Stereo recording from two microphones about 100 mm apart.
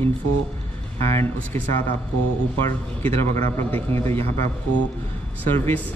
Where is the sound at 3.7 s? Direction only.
25° left (ahead or behind).